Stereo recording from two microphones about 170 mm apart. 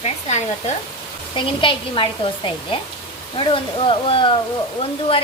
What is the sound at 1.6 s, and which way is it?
A woman's voice, 30° left (ahead or behind).